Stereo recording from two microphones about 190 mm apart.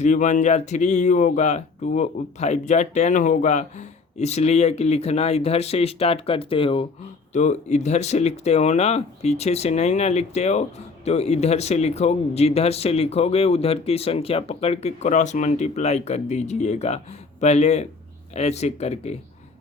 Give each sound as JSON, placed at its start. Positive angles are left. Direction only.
{"t": 0.0, "sound": "speech", "side_deg": 40}